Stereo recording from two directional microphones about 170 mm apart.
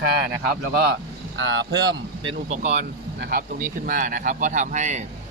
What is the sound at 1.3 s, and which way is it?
Speech, 90° right.